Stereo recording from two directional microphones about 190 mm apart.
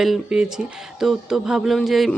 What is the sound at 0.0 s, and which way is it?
Speech, centre (ahead or behind).